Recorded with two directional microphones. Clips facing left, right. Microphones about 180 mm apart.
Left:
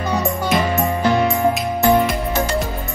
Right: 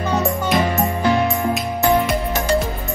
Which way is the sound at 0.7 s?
Centre (ahead or behind).